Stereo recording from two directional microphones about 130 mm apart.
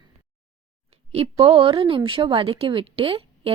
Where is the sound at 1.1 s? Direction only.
50° right (ahead or behind).